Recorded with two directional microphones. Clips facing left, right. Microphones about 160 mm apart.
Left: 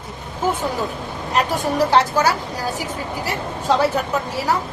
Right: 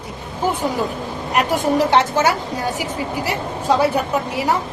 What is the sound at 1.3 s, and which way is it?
Speech, 20° right (ahead or behind).